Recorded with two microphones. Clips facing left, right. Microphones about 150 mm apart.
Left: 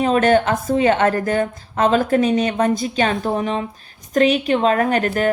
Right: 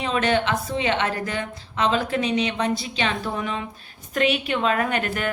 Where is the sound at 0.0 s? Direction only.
45° left (ahead or behind).